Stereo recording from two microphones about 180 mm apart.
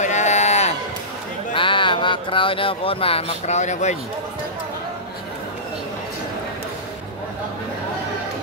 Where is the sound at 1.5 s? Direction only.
30° left (ahead or behind).